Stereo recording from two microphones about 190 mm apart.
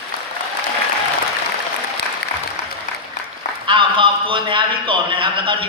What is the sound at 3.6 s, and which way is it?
A man's voice, 25° right (ahead or behind).